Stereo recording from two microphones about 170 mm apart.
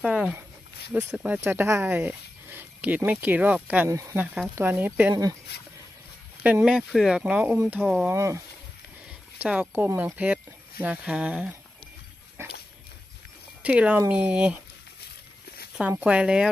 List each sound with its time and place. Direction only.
0.0 s speech: 5° right (ahead or behind)
6.4 s speech: 10° right (ahead or behind)
8.1 s speech: 15° right (ahead or behind)
13.6 s speech: 10° right (ahead or behind)
15.8 s speech: 10° right (ahead or behind)